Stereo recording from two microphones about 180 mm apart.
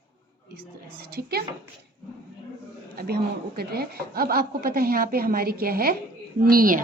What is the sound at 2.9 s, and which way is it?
A woman's voice, 60° right (ahead or behind).